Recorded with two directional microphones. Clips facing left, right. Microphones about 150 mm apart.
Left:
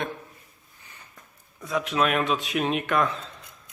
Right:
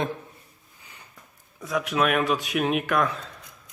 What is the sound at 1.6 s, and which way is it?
A man's voice, centre (ahead or behind).